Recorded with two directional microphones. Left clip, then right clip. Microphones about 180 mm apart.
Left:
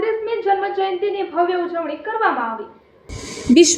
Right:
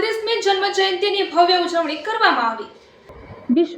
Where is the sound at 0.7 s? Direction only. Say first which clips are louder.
Right 2 dB; centre (ahead or behind).